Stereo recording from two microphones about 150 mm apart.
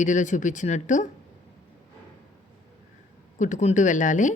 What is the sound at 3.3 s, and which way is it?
Speech, 55° left (ahead or behind).